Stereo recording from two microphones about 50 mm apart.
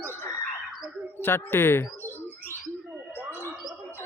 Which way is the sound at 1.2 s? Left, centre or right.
Left.